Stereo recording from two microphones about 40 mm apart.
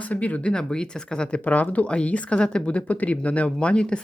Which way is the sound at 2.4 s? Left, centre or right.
Left.